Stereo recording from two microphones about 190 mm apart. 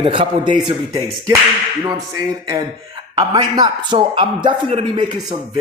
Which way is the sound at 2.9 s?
25° right (ahead or behind).